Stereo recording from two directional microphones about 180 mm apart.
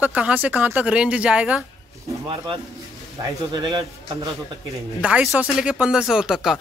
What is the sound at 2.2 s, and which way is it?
Speech, 25° right (ahead or behind).